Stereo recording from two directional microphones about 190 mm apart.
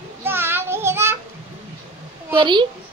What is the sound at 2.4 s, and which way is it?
Speech, 25° right (ahead or behind).